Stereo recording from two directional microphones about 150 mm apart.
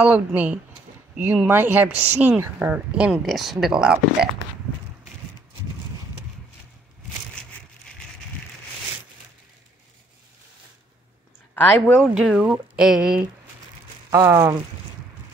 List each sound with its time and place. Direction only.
0.0 s speech: 10° right (ahead or behind)
11.6 s speech: 5° left (ahead or behind)
12.1 s speech: 5° right (ahead or behind)
14.1 s speech: 15° right (ahead or behind)